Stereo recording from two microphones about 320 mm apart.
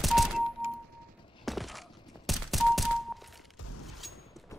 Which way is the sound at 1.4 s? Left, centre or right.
Centre.